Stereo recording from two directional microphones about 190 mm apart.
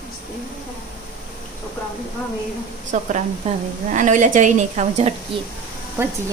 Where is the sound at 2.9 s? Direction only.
40° right (ahead or behind).